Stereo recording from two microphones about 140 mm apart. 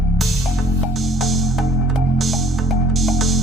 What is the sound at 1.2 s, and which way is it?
Music, centre (ahead or behind).